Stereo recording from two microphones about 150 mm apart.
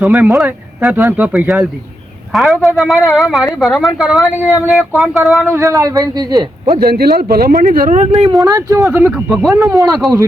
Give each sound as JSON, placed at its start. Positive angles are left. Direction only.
{"t": 0.0, "sound": "speech", "side_deg": -10}
{"t": 5.5, "sound": "a man's voice", "side_deg": -20}
{"t": 6.7, "sound": "speech", "side_deg": -90}
{"t": 7.6, "sound": "speech", "side_deg": -65}
{"t": 8.3, "sound": "a man's voice", "side_deg": -25}
{"t": 9.3, "sound": "speech", "side_deg": 0}
{"t": 9.6, "sound": "a man's voice", "side_deg": -20}